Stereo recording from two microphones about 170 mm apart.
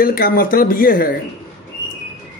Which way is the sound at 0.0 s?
60° left (ahead or behind).